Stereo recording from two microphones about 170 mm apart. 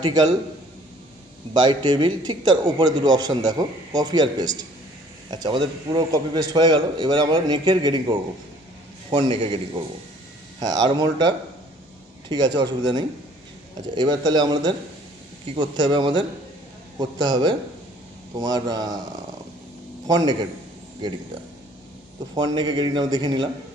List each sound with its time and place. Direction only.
0.0 s a man's voice: 20° right (ahead or behind)
1.6 s a man's voice: 25° right (ahead or behind)
10.6 s a man's voice: 20° right (ahead or behind)
20.1 s a man's voice: 25° right (ahead or behind)
22.4 s a man's voice: 25° right (ahead or behind)